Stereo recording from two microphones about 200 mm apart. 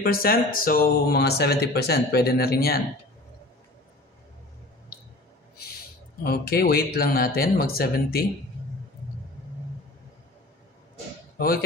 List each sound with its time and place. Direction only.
0.0 s speech: 50° left (ahead or behind)
6.2 s speech: 50° left (ahead or behind)
11.3 s speech: 50° left (ahead or behind)